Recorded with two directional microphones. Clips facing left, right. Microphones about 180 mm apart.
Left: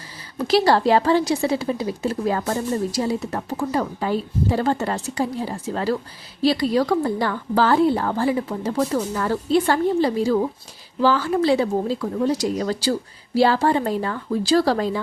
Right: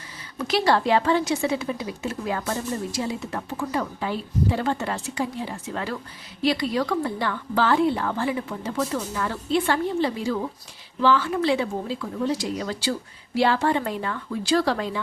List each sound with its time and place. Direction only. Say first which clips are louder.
0.3 s a woman's voice: left 4 dB; 35° left (ahead or behind)